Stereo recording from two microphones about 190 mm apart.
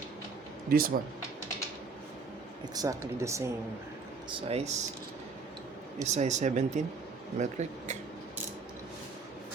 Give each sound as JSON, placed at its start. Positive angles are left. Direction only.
{"t": 0.7, "sound": "speech", "side_deg": -50}
{"t": 2.7, "sound": "speech", "side_deg": -15}
{"t": 4.3, "sound": "speech", "side_deg": -30}
{"t": 6.1, "sound": "speech", "side_deg": -35}